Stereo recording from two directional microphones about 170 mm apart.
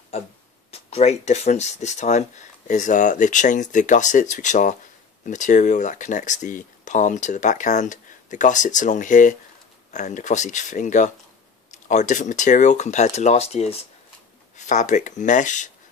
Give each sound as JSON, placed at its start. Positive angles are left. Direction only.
{"t": 0.7, "sound": "speech", "side_deg": 35}